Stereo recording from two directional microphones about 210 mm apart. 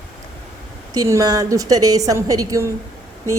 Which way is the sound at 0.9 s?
15° right (ahead or behind).